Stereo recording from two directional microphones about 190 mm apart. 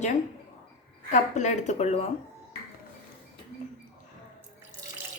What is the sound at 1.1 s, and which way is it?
Speech, 40° left (ahead or behind).